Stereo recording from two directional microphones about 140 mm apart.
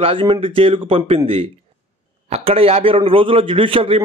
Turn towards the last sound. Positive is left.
turn(degrees=-40)  # may be behind; listen again after turning